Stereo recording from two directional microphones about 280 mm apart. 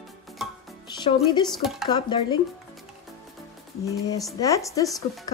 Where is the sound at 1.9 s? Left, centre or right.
Centre.